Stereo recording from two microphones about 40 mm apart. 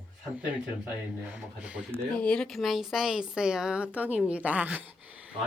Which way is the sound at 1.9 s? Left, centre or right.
Left.